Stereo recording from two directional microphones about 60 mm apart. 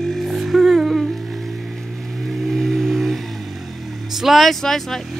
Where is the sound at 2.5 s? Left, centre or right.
Centre.